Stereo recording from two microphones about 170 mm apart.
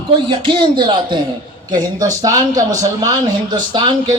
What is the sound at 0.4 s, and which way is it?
Speech, 25° right (ahead or behind).